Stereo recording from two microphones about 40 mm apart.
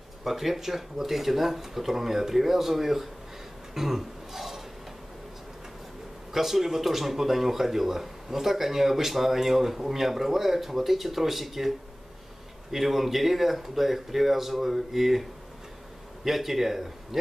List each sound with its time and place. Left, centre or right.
0.2 s speech: centre
3.7 s cough: centre
6.3 s speech: centre
12.7 s speech: centre
16.3 s speech: centre